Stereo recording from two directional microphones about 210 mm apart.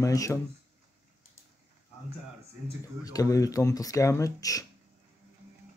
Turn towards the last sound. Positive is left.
turn(degrees=15)  # may be behind; listen again after turning